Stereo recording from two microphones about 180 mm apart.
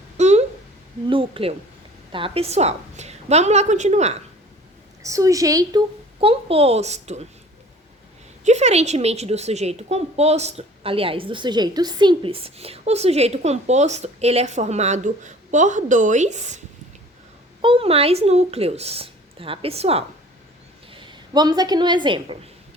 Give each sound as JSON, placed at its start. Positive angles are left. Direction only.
{"t": 0.2, "sound": "a sound", "side_deg": -40}
{"t": 1.0, "sound": "a child's voice", "side_deg": -30}
{"t": 5.0, "sound": "a woman's voice", "side_deg": -20}
{"t": 6.1, "sound": "a child's voice", "side_deg": -35}
{"t": 8.4, "sound": "a child's voice", "side_deg": -40}
{"t": 17.6, "sound": "a child's voice", "side_deg": -30}